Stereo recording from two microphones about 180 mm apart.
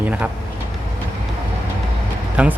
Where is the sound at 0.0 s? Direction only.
10° right (ahead or behind).